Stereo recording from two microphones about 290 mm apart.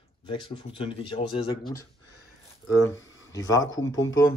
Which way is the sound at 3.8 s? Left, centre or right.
Left.